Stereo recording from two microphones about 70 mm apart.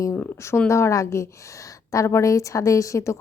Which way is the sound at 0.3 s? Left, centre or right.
Left.